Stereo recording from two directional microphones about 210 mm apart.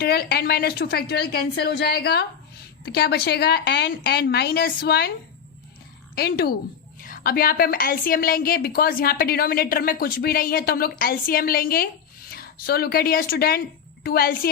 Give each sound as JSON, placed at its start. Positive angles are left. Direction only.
{"t": 0.0, "sound": "a woman's voice", "side_deg": 50}
{"t": 6.1, "sound": "a woman's voice", "side_deg": 50}